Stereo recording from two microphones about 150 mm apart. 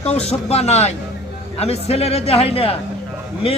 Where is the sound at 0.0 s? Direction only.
45° left (ahead or behind).